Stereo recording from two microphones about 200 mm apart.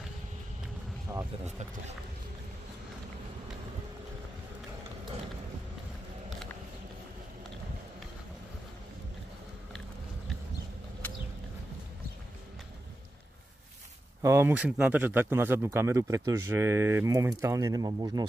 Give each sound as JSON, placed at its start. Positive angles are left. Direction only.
{"t": 1.1, "sound": "speech", "side_deg": -15}
{"t": 14.2, "sound": "speech", "side_deg": -15}